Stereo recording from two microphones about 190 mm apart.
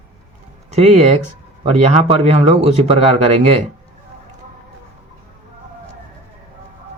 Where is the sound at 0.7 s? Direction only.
35° right (ahead or behind).